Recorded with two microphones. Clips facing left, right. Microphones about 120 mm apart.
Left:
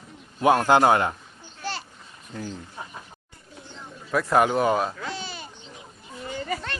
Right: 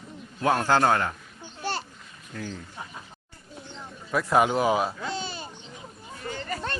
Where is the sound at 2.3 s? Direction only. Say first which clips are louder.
Left 1 dB; 20° left (ahead or behind).